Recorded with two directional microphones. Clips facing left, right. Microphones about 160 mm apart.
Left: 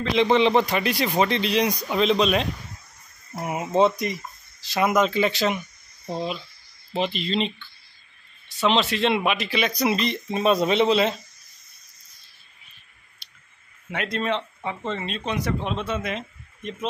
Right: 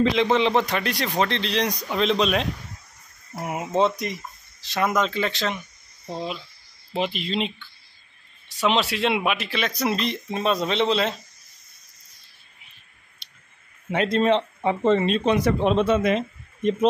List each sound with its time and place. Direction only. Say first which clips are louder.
0.1 s speech: left 2 dB; centre (ahead or behind)
13.2 s clicking: right 1 dB; 25° right (ahead or behind)
13.8 s speech: right 6 dB; 30° right (ahead or behind)
14.8 s speech: right 13 dB; 45° right (ahead or behind)
15.7 s speech: right 8 dB; 35° right (ahead or behind)